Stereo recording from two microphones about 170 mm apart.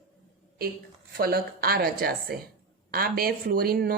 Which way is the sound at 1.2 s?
60° right (ahead or behind).